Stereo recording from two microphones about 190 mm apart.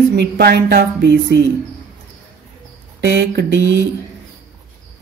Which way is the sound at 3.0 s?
65° right (ahead or behind).